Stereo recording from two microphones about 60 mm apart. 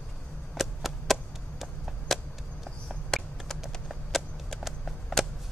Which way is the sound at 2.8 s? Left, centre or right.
Centre.